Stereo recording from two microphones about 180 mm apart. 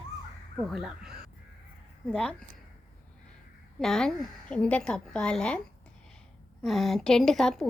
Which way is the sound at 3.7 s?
Centre (ahead or behind).